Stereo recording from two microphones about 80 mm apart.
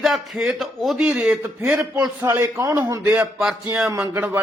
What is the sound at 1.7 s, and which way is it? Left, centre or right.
Speech, centre.